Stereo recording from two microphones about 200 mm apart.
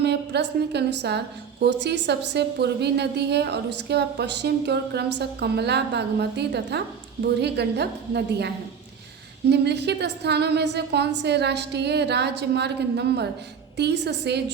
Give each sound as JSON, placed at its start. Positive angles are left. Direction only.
{"t": 0.0, "sound": "a woman's voice", "side_deg": -55}